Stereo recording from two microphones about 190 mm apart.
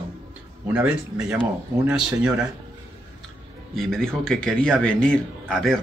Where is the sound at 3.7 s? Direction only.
Centre (ahead or behind).